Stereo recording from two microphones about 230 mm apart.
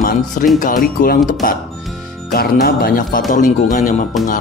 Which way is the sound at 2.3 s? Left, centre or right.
Left.